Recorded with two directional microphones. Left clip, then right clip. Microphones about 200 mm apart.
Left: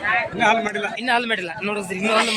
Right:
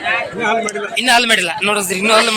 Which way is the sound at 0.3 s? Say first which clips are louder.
Left 2 dB; 10° left (ahead or behind).